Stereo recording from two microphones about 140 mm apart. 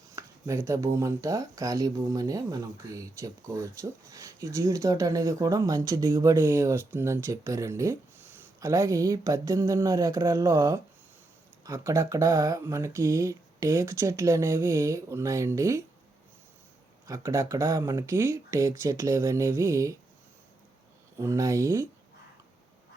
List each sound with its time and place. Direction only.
0.2 s speech: 20° right (ahead or behind)
17.1 s speech: 20° right (ahead or behind)
21.2 s speech: 25° right (ahead or behind)